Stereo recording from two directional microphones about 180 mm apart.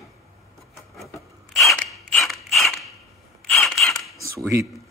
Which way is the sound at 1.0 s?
Centre (ahead or behind).